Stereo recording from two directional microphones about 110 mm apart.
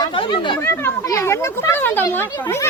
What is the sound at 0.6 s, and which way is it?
Speech, 20° left (ahead or behind).